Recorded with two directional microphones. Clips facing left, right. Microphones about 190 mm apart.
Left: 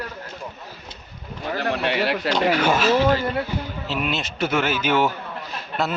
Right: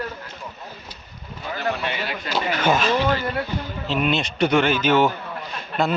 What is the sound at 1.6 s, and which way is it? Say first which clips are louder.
Speech: left 3 dB; 65° left (ahead or behind).